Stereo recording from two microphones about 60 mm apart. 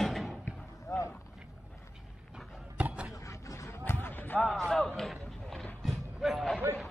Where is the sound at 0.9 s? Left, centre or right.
Left.